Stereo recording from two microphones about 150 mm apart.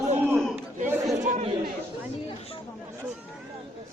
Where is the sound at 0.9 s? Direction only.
15° right (ahead or behind).